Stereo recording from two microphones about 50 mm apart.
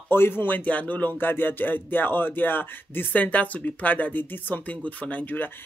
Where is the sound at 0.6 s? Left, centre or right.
Left.